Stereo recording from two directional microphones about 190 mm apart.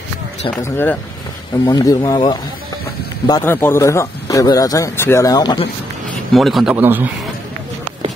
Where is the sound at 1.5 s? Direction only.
25° left (ahead or behind).